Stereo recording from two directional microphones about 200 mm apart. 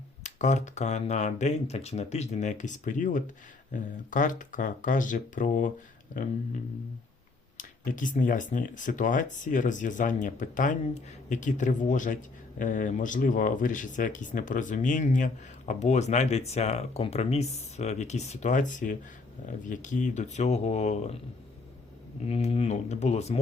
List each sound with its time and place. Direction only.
0.2 s speech: 35° left (ahead or behind)
7.5 s speech: 40° left (ahead or behind)
22.3 s speech: 30° left (ahead or behind)